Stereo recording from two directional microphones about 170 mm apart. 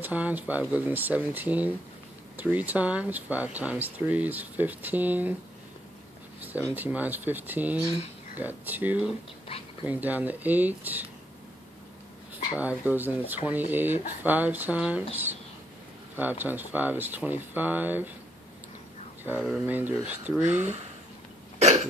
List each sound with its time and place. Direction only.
0.0 s speech: 10° right (ahead or behind)
6.7 s speech: 10° right (ahead or behind)
9.5 s speech: 30° left (ahead or behind)
9.8 s speech: 10° right (ahead or behind)
12.5 s speech: 10° right (ahead or behind)
16.2 s speech: 10° right (ahead or behind)
19.2 s speech: 10° right (ahead or behind)
20.4 s speech: 40° right (ahead or behind)